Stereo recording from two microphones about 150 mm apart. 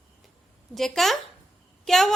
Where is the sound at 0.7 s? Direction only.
Centre (ahead or behind).